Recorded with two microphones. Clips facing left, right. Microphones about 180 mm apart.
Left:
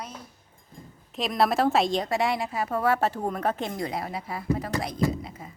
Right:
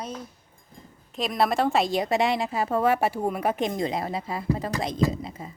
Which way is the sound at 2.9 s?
10° right (ahead or behind).